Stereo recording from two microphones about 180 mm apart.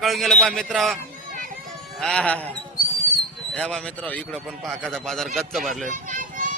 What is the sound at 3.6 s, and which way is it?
A man's voice, 5° left (ahead or behind).